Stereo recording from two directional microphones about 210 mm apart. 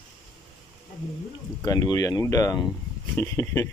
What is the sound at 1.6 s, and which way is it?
Speech, 15° left (ahead or behind).